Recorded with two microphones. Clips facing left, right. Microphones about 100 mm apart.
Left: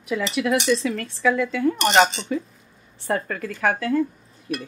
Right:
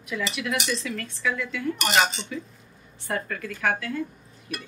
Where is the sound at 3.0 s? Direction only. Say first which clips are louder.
Left 5 dB; 35° left (ahead or behind).